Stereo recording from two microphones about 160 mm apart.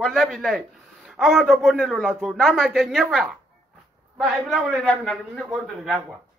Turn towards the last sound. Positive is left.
turn(degrees=-5)  # may be behind; listen again after turning